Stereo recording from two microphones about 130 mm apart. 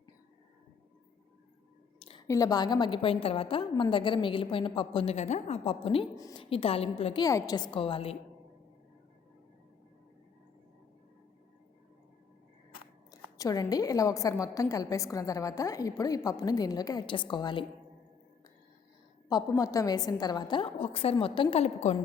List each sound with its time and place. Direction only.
2.2 s a woman's voice: 25° left (ahead or behind); by 5.1 s 45° left (ahead or behind)
5.1 s a woman's voice: 60° left (ahead or behind)
7.2 s a woman's voice: 30° left (ahead or behind); by 8.1 s 45° left (ahead or behind)
13.1 s a woman's voice: 25° left (ahead or behind)
19.5 s a woman's voice: 25° left (ahead or behind)
20.7 s a woman's voice: 50° left (ahead or behind)
21.6 s a woman's voice: 55° left (ahead or behind)